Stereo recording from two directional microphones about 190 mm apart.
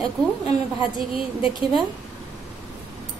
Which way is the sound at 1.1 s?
25° left (ahead or behind).